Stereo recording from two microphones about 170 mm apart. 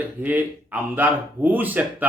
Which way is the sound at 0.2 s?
10° right (ahead or behind).